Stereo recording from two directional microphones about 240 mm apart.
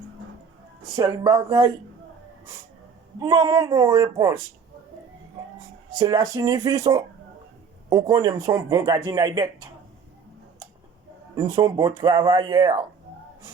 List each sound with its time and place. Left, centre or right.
0.9 s speech: centre
3.2 s speech: centre
6.0 s speech: centre
11.3 s speech: centre